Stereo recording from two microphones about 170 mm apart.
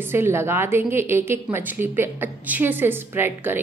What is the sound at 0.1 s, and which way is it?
A woman's voice, 15° right (ahead or behind).